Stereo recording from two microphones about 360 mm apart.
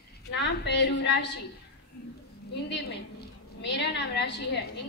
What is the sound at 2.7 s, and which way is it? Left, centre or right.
A woman's voice, left.